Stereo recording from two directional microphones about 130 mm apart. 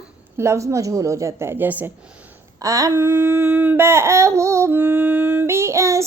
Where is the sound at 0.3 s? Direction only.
20° right (ahead or behind).